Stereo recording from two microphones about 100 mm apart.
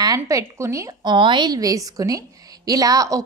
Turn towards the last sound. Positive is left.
turn(degrees=-35)  # may be behind; listen again after turning